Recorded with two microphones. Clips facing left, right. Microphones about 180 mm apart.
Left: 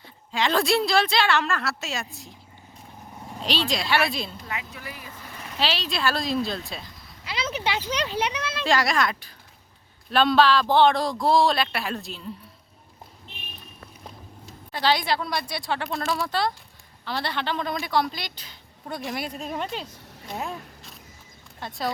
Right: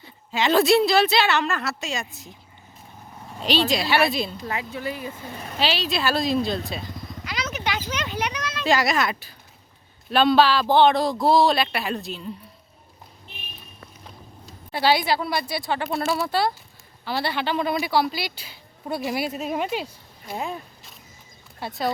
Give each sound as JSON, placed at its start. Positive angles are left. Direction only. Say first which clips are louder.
{"t": 0.0, "sound": "a woman's voice", "louder": "right 2 dB", "side_deg": -5}
{"t": 3.7, "sound": "a woman's voice", "louder": "right 3 dB", "side_deg": 0}
{"t": 4.4, "sound": "speech", "louder": "right 7 dB", "side_deg": -30}
{"t": 5.5, "sound": "a woman's voice", "louder": "right 3 dB", "side_deg": 0}
{"t": 7.3, "sound": "a child's voice", "louder": "left 1 dB", "side_deg": 30}
{"t": 8.6, "sound": "a woman's voice", "louder": "right 2 dB", "side_deg": 0}
{"t": 14.7, "sound": "a woman's voice", "louder": "right 3 dB", "side_deg": -10}